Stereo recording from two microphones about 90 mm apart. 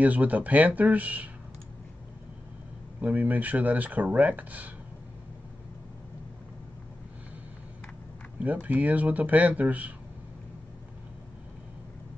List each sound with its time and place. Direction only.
0.0 s speech: 20° right (ahead or behind)
3.0 s speech: 20° right (ahead or behind)
8.4 s speech: 20° right (ahead or behind)